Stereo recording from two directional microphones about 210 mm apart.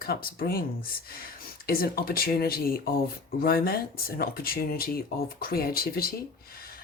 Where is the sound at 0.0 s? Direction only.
45° left (ahead or behind).